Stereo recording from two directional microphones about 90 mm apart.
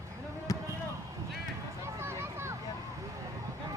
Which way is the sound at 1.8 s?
30° right (ahead or behind).